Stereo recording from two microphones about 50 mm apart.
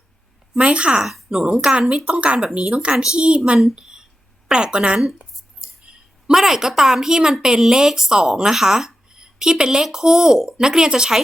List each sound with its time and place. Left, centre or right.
0.6 s a woman's voice: right
2.9 s speech: centre
3.2 s a woman's voice: right
3.8 s a sound: centre
4.4 s speech: centre
6.2 s speech: centre